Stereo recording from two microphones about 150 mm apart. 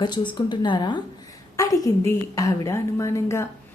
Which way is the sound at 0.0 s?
30° left (ahead or behind).